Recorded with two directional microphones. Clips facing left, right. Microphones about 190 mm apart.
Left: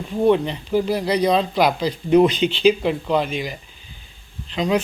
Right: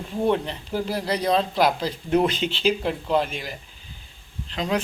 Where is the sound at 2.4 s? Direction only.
15° left (ahead or behind).